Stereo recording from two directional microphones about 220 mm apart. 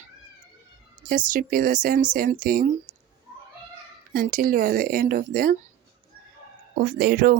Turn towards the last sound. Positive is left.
turn(degrees=-40)  # may be behind; listen again after turning